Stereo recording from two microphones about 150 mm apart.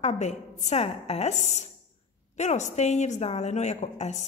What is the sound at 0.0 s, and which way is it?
A woman's voice, 50° left (ahead or behind).